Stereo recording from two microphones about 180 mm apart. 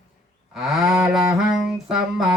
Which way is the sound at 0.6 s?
Centre (ahead or behind).